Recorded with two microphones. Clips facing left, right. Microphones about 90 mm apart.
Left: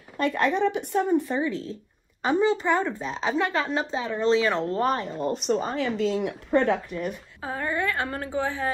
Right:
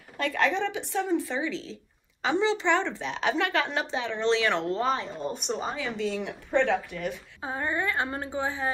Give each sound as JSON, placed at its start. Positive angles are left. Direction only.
{"t": 0.2, "sound": "speech", "side_deg": 50}
{"t": 3.0, "sound": "speech", "side_deg": 30}
{"t": 4.7, "sound": "a woman's voice", "side_deg": 55}
{"t": 6.2, "sound": "speech", "side_deg": 45}
{"t": 7.4, "sound": "a woman's voice", "side_deg": -20}